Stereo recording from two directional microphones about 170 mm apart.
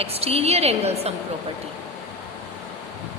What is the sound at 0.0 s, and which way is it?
A woman's voice, 35° right (ahead or behind).